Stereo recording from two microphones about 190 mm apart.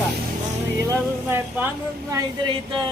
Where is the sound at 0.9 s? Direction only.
10° right (ahead or behind).